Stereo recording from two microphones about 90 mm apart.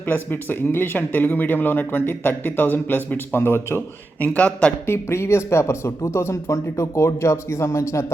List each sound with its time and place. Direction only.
0.0 s speech: 20° left (ahead or behind)
4.9 s speech: 30° left (ahead or behind)